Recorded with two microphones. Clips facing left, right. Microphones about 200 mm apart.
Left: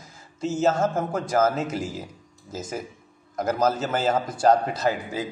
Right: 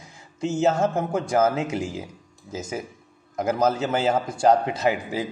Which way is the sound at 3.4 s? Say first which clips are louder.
Right 1 dB; 10° right (ahead or behind).